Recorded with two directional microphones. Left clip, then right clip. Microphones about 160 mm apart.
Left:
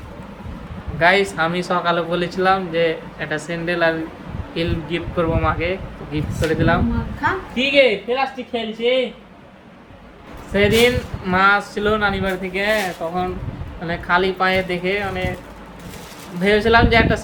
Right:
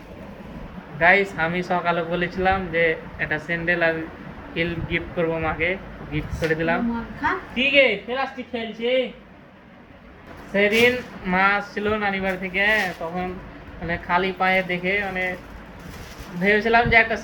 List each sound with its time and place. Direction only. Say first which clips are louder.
0.9 s speech: left 2 dB; 30° left (ahead or behind)
10.5 s speech: left 3 dB; 30° left (ahead or behind)
16.4 s speech: left 3 dB; 30° left (ahead or behind)